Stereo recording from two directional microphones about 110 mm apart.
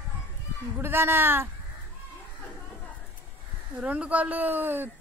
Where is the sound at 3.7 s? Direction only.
10° right (ahead or behind).